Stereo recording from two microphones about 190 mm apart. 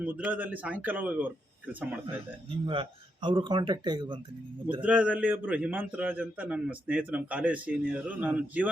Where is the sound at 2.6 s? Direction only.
25° right (ahead or behind).